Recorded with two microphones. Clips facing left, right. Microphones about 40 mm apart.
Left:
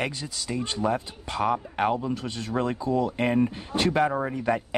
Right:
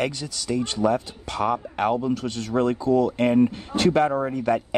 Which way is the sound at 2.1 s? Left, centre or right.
Centre.